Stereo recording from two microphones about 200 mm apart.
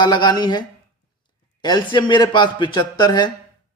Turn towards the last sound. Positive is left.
turn(degrees=20)  # may be behind; listen again after turning